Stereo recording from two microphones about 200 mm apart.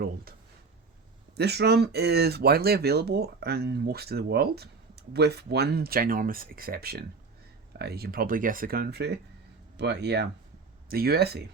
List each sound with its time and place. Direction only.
1.4 s speech: 55° right (ahead or behind)